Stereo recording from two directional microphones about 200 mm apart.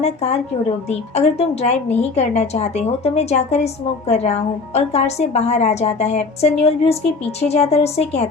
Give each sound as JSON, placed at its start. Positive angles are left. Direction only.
{"t": 0.0, "sound": "a woman's voice", "side_deg": 35}